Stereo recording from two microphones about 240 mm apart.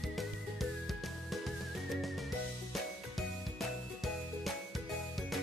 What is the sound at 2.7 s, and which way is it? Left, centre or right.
Music, centre.